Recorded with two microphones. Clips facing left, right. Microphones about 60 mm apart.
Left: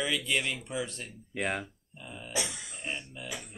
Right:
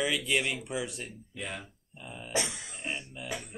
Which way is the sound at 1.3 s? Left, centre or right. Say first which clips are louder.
Left 7 dB; left.